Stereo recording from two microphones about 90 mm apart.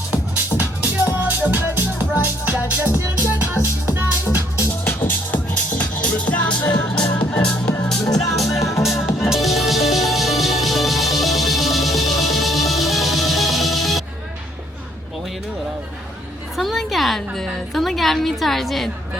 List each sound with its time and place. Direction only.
0.1 s music: 20° right (ahead or behind)
5.0 s music: 20° left (ahead or behind); by 14.0 s centre (ahead or behind)
16.6 s music: centre (ahead or behind)